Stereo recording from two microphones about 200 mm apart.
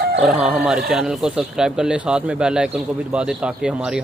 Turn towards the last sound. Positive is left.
turn(degrees=-5)  # may be behind; listen again after turning